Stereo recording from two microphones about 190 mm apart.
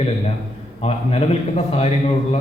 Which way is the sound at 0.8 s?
30° left (ahead or behind).